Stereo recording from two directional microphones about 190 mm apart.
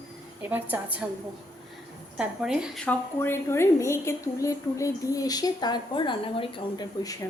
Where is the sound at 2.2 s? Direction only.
5° right (ahead or behind); by 7.1 s 25° left (ahead or behind).